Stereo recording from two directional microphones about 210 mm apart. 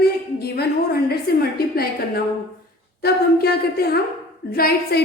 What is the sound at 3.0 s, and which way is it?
A woman's voice, 50° left (ahead or behind).